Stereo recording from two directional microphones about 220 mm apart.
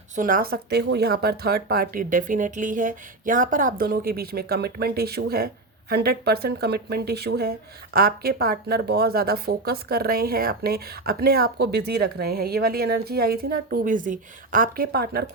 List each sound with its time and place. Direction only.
0.2 s speech: 40° right (ahead or behind)